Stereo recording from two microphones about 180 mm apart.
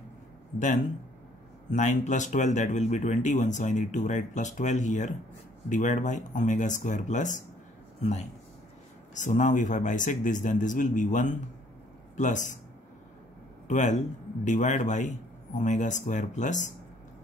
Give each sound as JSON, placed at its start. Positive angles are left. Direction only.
{"t": 1.7, "sound": "speech", "side_deg": 40}
{"t": 9.1, "sound": "speech", "side_deg": 45}
{"t": 13.7, "sound": "speech", "side_deg": 40}